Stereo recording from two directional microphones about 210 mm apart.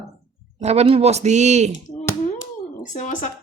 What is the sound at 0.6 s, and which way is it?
Speech, 30° right (ahead or behind).